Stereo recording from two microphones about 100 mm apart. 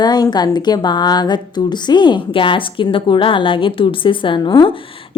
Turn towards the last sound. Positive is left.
turn(degrees=55)  # may be behind; listen again after turning